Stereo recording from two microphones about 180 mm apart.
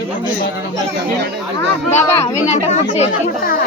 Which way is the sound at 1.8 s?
15° left (ahead or behind).